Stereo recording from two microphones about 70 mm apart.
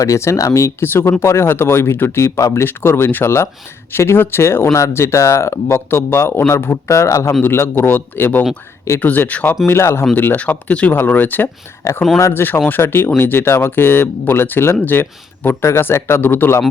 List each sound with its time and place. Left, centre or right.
0.0 s speech: left
6.9 s speech: left
7.4 s speech: left
9.6 s speech: left
10.2 s speech: left